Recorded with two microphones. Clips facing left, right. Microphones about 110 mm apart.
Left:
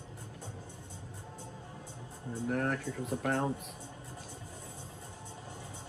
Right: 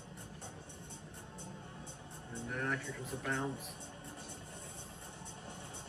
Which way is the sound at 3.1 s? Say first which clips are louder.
Left 7 dB; 60° left (ahead or behind).